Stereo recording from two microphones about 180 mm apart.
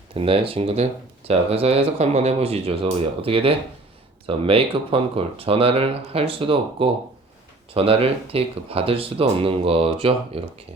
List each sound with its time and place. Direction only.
0.2 s speech: 30° right (ahead or behind)